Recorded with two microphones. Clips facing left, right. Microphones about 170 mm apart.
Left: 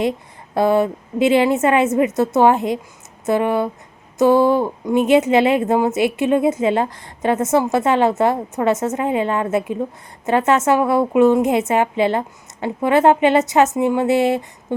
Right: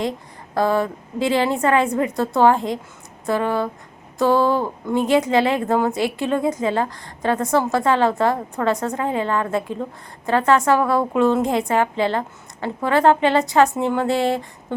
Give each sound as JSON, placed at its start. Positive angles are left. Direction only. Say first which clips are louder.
{"t": 0.5, "sound": "a woman's voice", "louder": "left 4 dB", "side_deg": 20}